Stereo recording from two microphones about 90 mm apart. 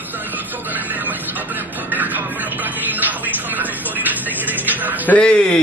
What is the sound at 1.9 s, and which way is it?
Music, 20° right (ahead or behind).